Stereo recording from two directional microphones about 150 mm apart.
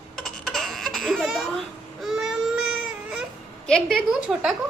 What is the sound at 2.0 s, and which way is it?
Baby cry, centre (ahead or behind).